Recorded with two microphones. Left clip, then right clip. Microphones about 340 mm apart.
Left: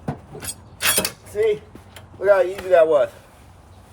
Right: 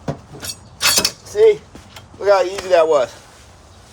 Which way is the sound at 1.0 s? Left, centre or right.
Centre.